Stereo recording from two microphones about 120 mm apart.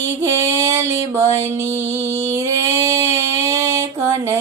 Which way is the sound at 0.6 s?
20° right (ahead or behind).